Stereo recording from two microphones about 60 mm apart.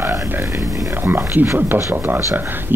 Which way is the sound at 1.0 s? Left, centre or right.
Right.